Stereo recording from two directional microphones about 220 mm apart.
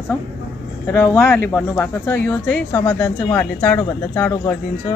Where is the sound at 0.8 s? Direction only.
10° left (ahead or behind).